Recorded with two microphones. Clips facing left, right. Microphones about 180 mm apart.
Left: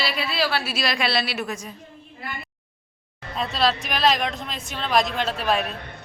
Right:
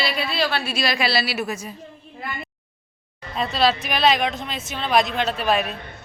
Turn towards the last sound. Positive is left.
turn(degrees=0)  # may be behind; listen again after turning